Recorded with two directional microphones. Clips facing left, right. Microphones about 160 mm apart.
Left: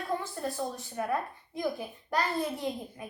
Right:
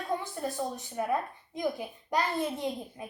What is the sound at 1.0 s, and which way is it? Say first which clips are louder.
A child's voice: right 1 dB; 20° right (ahead or behind).